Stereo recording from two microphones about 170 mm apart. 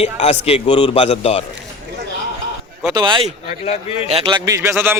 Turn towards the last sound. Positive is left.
turn(degrees=-15)  # may be behind; listen again after turning